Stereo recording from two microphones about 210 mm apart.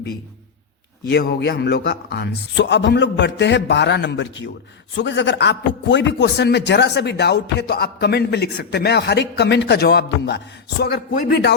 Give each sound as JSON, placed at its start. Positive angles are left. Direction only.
{"t": 1.1, "sound": "a man's voice", "side_deg": 55}